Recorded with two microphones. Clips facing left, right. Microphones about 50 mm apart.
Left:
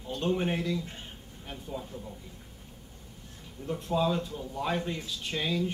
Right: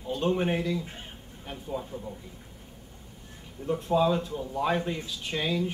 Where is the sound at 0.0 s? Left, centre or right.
Centre.